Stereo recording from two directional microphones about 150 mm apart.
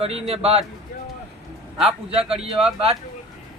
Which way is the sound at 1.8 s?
40° right (ahead or behind).